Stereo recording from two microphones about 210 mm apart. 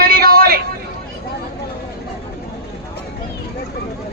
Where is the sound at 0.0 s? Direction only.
45° right (ahead or behind).